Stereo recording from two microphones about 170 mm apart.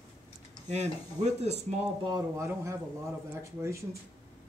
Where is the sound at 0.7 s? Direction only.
40° right (ahead or behind).